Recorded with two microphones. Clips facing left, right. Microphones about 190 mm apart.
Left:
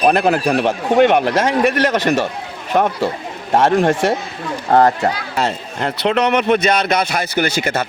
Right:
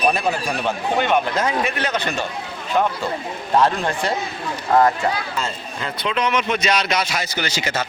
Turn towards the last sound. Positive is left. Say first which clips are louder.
# left 6 dB
turn(degrees=60)  # may be behind; listen again after turning